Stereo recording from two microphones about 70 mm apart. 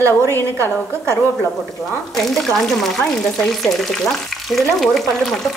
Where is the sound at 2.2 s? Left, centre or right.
Centre.